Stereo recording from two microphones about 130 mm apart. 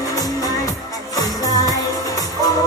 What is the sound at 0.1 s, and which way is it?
Music, 25° left (ahead or behind).